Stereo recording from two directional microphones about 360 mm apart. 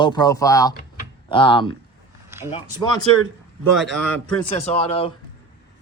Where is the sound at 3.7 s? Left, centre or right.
Centre.